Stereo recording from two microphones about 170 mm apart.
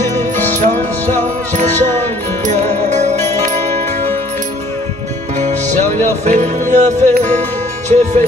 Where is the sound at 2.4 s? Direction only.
45° right (ahead or behind).